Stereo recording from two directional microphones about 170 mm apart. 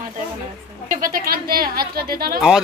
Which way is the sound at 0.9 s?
55° right (ahead or behind).